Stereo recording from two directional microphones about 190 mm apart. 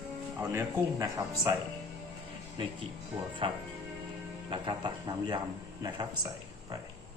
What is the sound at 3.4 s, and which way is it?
Speech, 30° right (ahead or behind).